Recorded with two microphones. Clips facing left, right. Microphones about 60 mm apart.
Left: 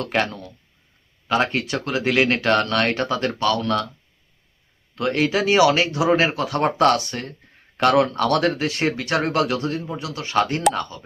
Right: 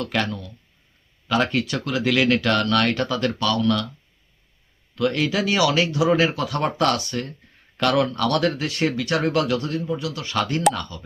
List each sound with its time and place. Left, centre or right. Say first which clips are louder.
0.0 s speech: left 2 dB; left
4.9 s speech: left 1 dB; left